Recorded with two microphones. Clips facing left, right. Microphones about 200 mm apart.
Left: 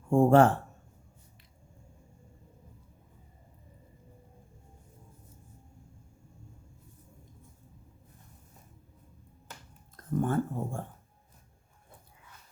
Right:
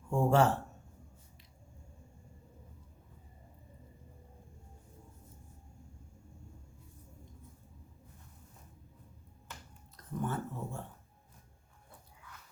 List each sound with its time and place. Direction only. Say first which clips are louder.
0.1 s speech: left 7 dB; 55° left (ahead or behind)
10.2 s speech: left 8 dB; 50° left (ahead or behind)